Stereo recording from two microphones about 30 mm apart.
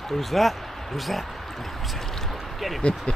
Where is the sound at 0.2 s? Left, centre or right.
Centre.